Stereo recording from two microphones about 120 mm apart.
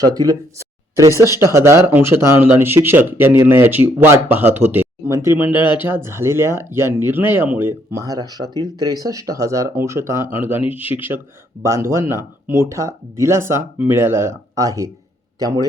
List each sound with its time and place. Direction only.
0.0 s speech: 30° right (ahead or behind)
5.5 s speech: 45° left (ahead or behind)
5.8 s speech: 20° right (ahead or behind)
7.9 s speech: 30° right (ahead or behind)